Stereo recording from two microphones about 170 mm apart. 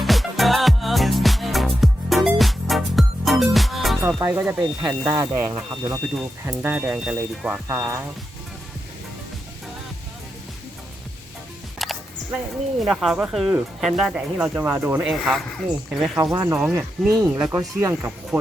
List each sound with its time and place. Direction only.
0.0 s music: centre (ahead or behind)
4.2 s speech: 15° right (ahead or behind)
4.6 s speech: 25° right (ahead or behind)
5.7 s speech: 25° right (ahead or behind)
6.5 s speech: 10° right (ahead or behind)
11.8 s music: centre (ahead or behind)
12.8 s speech: centre (ahead or behind)
15.0 s speech: centre (ahead or behind)
16.1 s speech: 20° right (ahead or behind)
16.6 s speech: 5° right (ahead or behind)
17.2 s speech: 20° right (ahead or behind)